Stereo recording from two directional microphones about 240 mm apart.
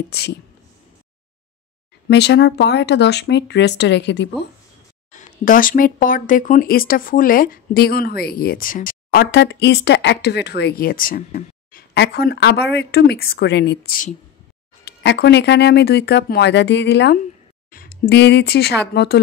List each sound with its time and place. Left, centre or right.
0.1 s speech: left
2.0 s speech: left
5.1 s speech: left